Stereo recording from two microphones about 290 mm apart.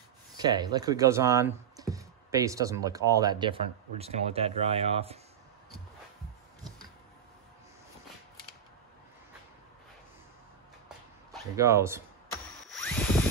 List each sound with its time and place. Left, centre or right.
0.4 s speech: centre
11.5 s speech: centre
12.6 s a sound: centre